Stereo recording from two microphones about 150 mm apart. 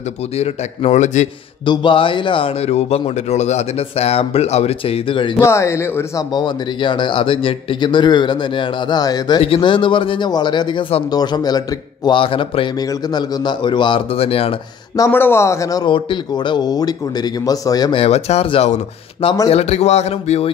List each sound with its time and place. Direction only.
0.4 s speech: 50° left (ahead or behind)
1.7 s speech: 35° left (ahead or behind)
5.4 s speech: 20° left (ahead or behind); by 11.1 s 35° left (ahead or behind)
11.1 s a man's voice: 25° left (ahead or behind)
15.0 s a man's voice: 15° left (ahead or behind)
17.9 s speech: 45° left (ahead or behind)